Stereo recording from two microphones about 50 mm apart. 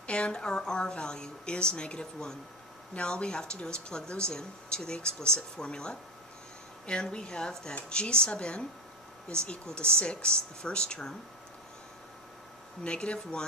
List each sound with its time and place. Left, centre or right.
0.0 s speech: left
12.8 s speech: left